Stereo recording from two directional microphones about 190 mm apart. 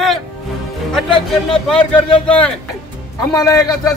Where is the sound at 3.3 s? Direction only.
15° left (ahead or behind).